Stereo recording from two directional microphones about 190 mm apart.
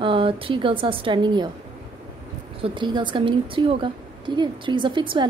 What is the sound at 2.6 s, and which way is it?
Speech, 25° right (ahead or behind).